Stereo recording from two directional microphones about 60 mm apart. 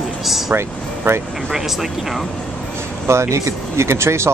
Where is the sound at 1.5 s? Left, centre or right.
Centre.